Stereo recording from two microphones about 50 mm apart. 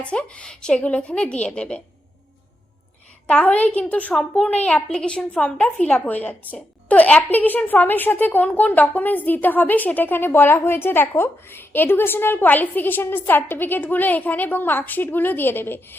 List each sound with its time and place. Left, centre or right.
0.0 s a woman's voice: left
3.2 s a woman's voice: left
6.1 s a woman's voice: left